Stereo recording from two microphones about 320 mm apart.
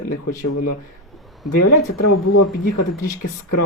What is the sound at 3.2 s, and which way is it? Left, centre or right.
Speech, left.